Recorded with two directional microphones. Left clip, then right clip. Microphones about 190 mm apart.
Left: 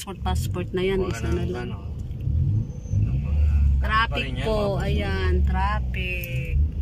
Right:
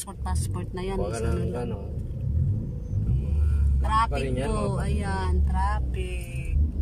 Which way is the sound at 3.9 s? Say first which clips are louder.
Left 1 dB; 10° right (ahead or behind).